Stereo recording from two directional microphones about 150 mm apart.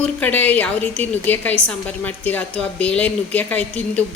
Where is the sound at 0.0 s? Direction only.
10° left (ahead or behind).